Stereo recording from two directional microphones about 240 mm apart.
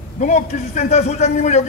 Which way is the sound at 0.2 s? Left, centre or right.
Left.